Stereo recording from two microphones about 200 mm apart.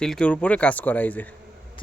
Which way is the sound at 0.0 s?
5° left (ahead or behind).